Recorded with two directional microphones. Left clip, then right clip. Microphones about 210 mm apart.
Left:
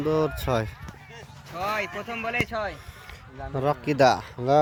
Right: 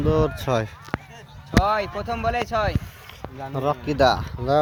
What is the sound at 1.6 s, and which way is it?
Speech, 35° right (ahead or behind).